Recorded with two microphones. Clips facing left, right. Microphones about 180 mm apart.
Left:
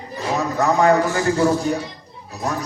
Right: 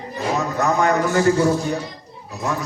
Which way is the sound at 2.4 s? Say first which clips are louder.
Even; 40° left (ahead or behind).